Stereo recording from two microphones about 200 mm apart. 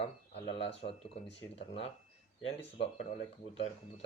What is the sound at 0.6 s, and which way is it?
Speech, 30° left (ahead or behind).